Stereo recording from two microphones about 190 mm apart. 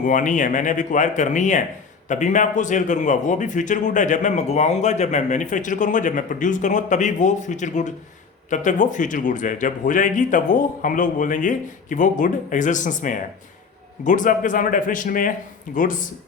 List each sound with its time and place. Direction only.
0.0 s a man's voice: 40° left (ahead or behind)